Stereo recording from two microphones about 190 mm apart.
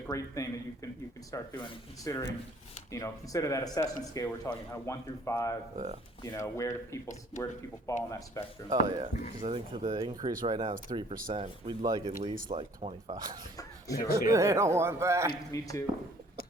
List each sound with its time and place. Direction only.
0.1 s speech: 15° left (ahead or behind)
5.7 s speech: 40° right (ahead or behind)
6.2 s speech: 15° left (ahead or behind)
8.7 s speech: 20° right (ahead or behind)
11.1 s speech: 50° right (ahead or behind)
11.3 s speech: 30° right (ahead or behind)
14.3 s speech: 15° right (ahead or behind)
15.5 s speech: 15° left (ahead or behind)